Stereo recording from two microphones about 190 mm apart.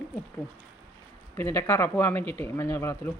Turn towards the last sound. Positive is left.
turn(degrees=15)  # may be behind; listen again after turning